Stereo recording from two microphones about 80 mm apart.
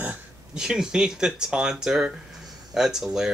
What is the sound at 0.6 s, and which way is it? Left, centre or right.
Speech, centre.